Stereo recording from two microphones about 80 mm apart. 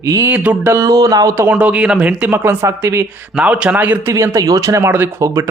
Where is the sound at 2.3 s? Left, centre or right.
Right.